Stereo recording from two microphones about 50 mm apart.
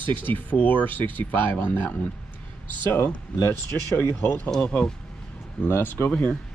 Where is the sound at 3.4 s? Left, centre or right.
Left.